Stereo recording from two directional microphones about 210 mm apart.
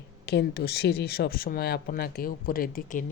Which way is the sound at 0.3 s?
50° left (ahead or behind).